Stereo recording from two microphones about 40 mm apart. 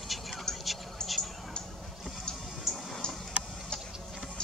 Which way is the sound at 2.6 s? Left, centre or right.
Centre.